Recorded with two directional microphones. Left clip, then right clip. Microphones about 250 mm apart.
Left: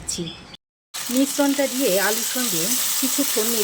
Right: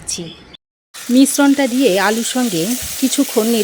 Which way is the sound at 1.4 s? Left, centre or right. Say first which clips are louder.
Right 7 dB; right.